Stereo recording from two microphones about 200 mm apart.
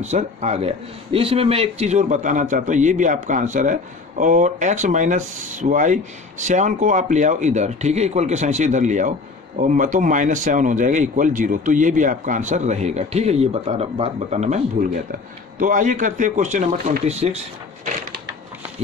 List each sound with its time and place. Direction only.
0.0 s a man's voice: 35° right (ahead or behind)